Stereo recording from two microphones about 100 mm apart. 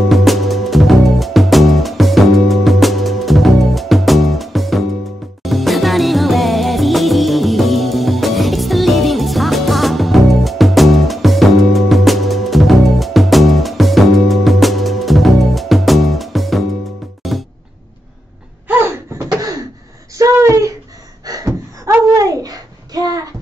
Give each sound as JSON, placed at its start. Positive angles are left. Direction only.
{"t": 0.1, "sound": "music", "side_deg": 0}
{"t": 18.7, "sound": "bouncing", "side_deg": -20}
{"t": 20.2, "sound": "a sound", "side_deg": -30}